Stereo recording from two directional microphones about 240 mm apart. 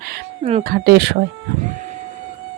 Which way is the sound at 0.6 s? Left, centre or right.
Right.